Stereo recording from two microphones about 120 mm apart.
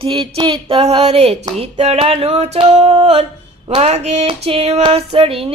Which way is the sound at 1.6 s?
65° right (ahead or behind).